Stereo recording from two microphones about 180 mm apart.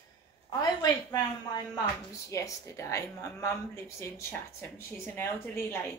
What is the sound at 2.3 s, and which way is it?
Speech, 15° left (ahead or behind).